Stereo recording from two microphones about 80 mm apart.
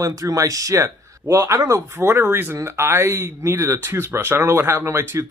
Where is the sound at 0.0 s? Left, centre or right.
Right.